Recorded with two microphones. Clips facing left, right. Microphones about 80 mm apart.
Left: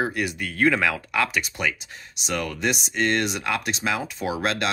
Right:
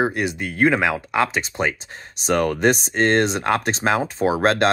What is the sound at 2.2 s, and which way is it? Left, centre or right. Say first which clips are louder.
Speech: right 8 dB; right.